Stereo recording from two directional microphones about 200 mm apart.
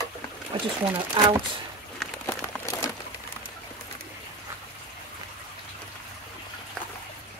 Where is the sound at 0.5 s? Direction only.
25° right (ahead or behind).